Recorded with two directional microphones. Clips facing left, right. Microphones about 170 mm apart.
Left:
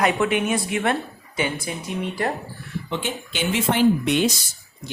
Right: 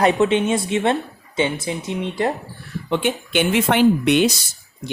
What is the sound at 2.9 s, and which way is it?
Speech, 55° right (ahead or behind).